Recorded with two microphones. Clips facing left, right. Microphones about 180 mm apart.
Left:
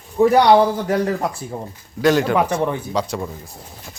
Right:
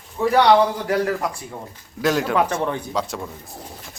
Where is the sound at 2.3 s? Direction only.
15° left (ahead or behind).